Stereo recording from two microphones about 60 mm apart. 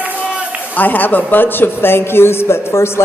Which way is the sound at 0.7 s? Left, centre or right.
Left.